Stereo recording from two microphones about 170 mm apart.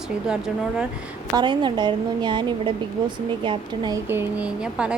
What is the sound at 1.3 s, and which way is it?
A woman's voice, 25° right (ahead or behind).